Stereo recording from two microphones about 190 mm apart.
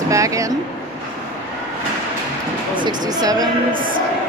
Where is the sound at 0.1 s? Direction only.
15° right (ahead or behind).